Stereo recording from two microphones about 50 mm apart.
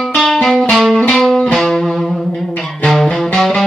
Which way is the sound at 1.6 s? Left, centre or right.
Centre.